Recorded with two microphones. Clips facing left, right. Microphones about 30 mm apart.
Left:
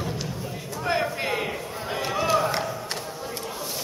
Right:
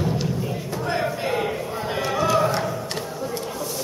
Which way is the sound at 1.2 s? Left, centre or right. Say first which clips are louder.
Right 3 dB; centre.